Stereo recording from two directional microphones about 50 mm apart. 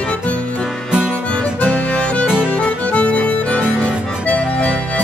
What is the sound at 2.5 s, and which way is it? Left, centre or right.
Music, left.